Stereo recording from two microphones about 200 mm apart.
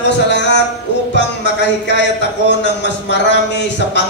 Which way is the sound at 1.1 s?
60° left (ahead or behind).